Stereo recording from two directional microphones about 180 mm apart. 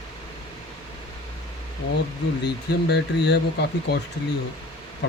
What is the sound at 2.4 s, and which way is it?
Speech, 70° left (ahead or behind).